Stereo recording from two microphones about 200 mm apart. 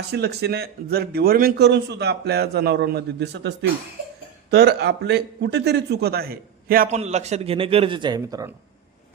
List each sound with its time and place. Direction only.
0.1 s speech: 55° right (ahead or behind)
6.8 s a man's voice: 35° right (ahead or behind); by 8.5 s 15° right (ahead or behind)